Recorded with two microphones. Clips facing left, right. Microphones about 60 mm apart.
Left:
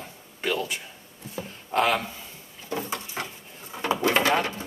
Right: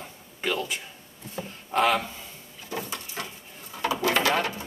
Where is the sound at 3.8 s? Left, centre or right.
Left.